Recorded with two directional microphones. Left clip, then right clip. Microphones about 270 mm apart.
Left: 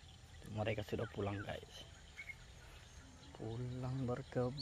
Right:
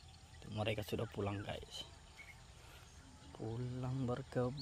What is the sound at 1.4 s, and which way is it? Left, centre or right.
Speech, centre.